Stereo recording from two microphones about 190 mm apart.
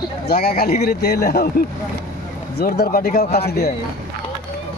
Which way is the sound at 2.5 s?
55° left (ahead or behind).